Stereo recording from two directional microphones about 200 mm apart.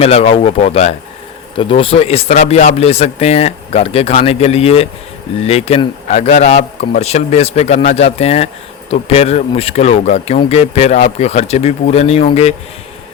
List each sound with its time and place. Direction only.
0.0 s speech: 30° left (ahead or behind)